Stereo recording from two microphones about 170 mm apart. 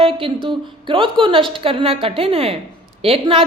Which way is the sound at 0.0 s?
30° right (ahead or behind).